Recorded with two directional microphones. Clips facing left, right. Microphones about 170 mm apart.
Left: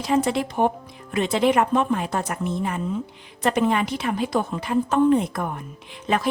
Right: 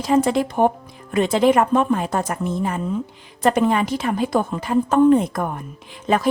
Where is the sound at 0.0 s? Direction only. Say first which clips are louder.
Right 4 dB; 40° right (ahead or behind).